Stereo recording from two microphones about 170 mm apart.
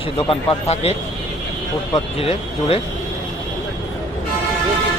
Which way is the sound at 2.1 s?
35° left (ahead or behind).